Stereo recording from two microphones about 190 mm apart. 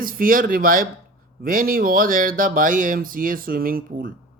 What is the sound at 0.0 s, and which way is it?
Speech, 50° right (ahead or behind).